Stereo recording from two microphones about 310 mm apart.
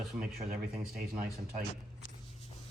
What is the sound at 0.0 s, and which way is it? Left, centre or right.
Speech, centre.